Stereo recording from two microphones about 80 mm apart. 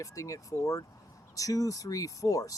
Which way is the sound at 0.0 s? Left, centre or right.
Left.